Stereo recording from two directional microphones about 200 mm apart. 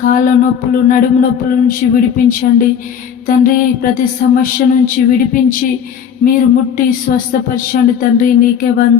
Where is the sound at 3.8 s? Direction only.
45° left (ahead or behind).